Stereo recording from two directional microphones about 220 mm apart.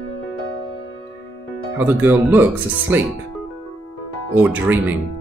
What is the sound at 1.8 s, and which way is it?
Speech, 10° right (ahead or behind).